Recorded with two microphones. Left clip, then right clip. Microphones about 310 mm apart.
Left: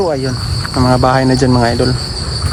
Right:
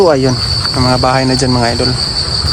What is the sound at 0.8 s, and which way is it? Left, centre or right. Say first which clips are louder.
Cricket: left 1 dB; centre.